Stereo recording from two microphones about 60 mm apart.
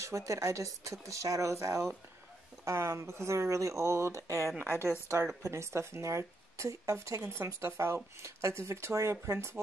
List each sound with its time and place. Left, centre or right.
0.0 s speech: right
5.0 s speech: right